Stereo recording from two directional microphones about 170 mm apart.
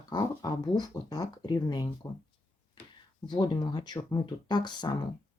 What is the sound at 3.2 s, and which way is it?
Speech, 25° left (ahead or behind).